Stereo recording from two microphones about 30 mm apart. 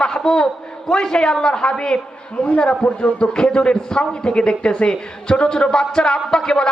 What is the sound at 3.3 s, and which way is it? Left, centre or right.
A woman's voice, left.